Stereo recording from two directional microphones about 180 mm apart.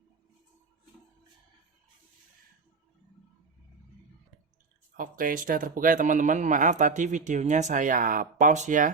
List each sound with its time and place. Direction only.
4.9 s speech: 50° right (ahead or behind)